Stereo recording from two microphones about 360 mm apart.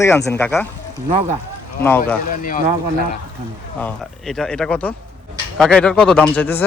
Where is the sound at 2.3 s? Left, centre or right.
Left.